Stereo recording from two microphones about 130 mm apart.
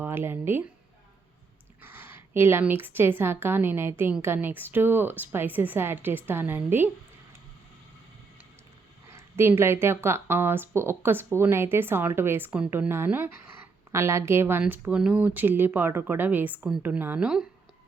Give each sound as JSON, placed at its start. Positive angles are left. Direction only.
{"t": 0.0, "sound": "speech", "side_deg": -15}
{"t": 1.8, "sound": "speech", "side_deg": -15}
{"t": 9.0, "sound": "speech", "side_deg": -20}